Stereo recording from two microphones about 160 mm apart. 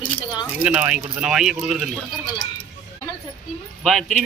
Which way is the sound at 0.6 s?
5° right (ahead or behind).